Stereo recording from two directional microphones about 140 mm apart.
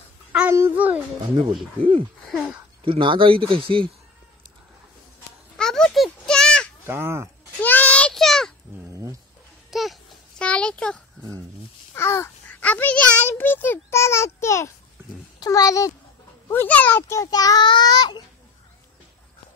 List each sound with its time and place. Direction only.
0.5 s a child's voice: 20° right (ahead or behind)
2.2 s a sound: 5° right (ahead or behind)
2.8 s a man's voice: 35° right (ahead or behind)
5.6 s a sound: 5° left (ahead or behind)
6.9 s a child's voice: 15° right (ahead or behind)
7.6 s child singing: 10° left (ahead or behind)
9.7 s babbling: centre (ahead or behind)
10.4 s a sound: 10° left (ahead or behind)
11.9 s a sound: 20° left (ahead or behind)
15.4 s a child's voice: 25° left (ahead or behind)
16.4 s speech: 15° left (ahead or behind)
17.2 s a child's voice: 25° left (ahead or behind)